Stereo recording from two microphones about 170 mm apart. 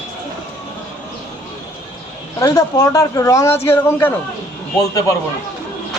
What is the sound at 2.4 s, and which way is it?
Speech, 20° left (ahead or behind).